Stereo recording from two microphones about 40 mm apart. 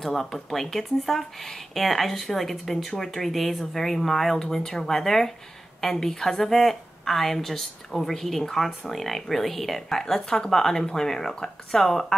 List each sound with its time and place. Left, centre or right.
0.0 s a woman's voice: centre